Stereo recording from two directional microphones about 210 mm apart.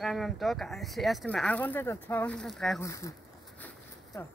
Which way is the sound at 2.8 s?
15° left (ahead or behind).